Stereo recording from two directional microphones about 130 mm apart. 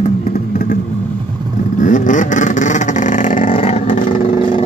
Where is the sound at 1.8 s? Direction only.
80° left.